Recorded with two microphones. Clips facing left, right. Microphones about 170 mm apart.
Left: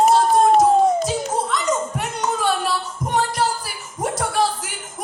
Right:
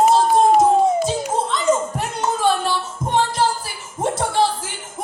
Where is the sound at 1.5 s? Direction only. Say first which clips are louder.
Right 3 dB; 25° right (ahead or behind).